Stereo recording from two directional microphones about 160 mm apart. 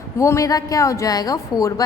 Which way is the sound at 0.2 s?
20° left (ahead or behind).